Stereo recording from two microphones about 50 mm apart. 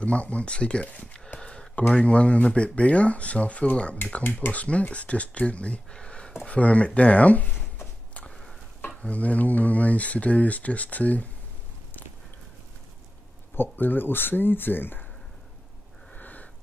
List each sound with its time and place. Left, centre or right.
0.0 s speech: left
1.4 s a sound: left
2.0 s speech: left
4.2 s speech: left
9.0 s speech: left
13.6 s speech: left
16.2 s sniff: left